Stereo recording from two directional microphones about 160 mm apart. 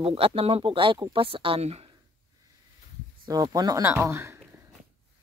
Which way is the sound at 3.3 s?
25° right (ahead or behind).